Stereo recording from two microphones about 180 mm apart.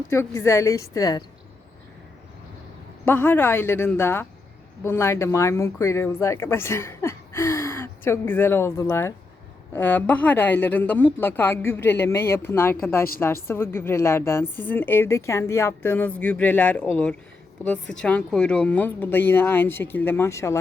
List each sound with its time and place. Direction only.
0.1 s speech: 15° left (ahead or behind)
3.1 s speech: 10° left (ahead or behind)